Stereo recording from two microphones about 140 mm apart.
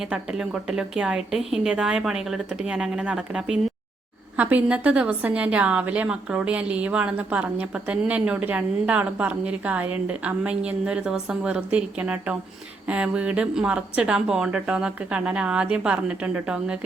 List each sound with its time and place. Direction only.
0.0 s a woman's voice: 5° right (ahead or behind)